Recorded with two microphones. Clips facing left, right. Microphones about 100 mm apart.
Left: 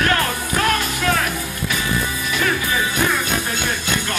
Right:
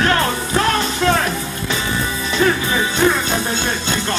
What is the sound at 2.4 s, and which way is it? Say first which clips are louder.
Music: right 6 dB; 30° right (ahead or behind).